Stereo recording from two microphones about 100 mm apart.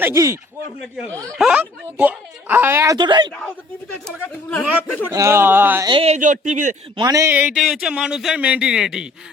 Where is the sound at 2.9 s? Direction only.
50° right (ahead or behind).